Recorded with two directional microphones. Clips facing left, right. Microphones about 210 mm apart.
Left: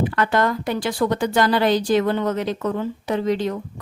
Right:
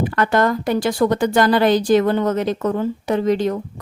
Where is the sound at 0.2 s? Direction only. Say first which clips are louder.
Right 5 dB; 45° right (ahead or behind).